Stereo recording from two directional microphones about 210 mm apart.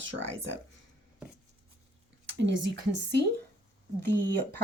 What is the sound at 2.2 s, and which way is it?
Speech, 60° right (ahead or behind).